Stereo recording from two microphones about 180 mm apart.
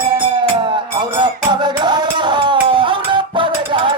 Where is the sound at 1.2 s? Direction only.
25° right (ahead or behind).